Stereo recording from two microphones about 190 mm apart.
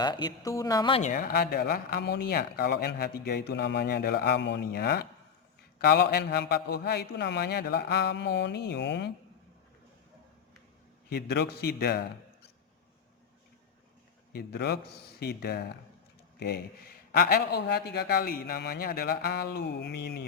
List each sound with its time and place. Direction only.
0.0 s a woman's voice: 20° left (ahead or behind)
1.0 s speech: 50° left (ahead or behind); by 9.1 s 65° left (ahead or behind)
11.1 s speech: 60° left (ahead or behind)
14.3 s speech: 60° left (ahead or behind)